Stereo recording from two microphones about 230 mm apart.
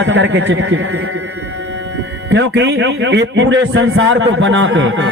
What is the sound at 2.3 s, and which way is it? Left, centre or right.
A man's voice, right.